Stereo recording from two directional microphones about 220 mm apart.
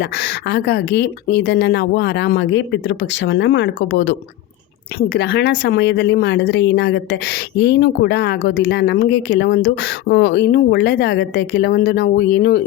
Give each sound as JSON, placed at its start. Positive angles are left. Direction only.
{"t": 0.0, "sound": "speech", "side_deg": 50}